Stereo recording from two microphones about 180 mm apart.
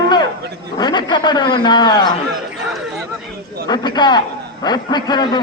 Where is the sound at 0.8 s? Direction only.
25° left (ahead or behind).